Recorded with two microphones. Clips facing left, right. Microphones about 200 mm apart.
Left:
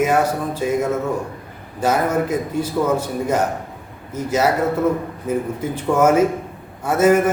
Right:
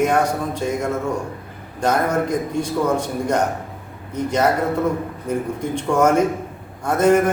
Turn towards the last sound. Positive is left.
turn(degrees=5)  # may be behind; listen again after turning